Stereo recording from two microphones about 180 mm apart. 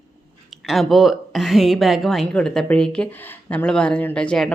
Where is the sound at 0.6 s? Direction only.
Centre (ahead or behind).